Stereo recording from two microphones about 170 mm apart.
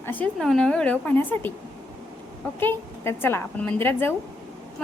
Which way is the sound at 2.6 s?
15° left (ahead or behind).